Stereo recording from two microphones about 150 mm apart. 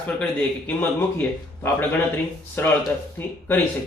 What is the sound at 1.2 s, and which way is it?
Speech, 15° left (ahead or behind).